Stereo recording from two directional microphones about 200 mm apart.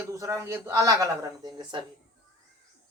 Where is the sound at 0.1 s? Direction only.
15° right (ahead or behind).